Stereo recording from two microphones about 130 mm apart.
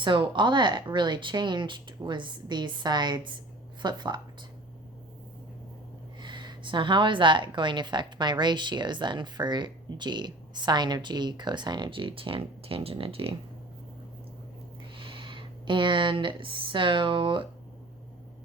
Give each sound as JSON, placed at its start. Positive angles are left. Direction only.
{"t": 0.0, "sound": "a woman's voice", "side_deg": -35}
{"t": 6.1, "sound": "a woman's voice", "side_deg": -35}
{"t": 14.9, "sound": "speech", "side_deg": -40}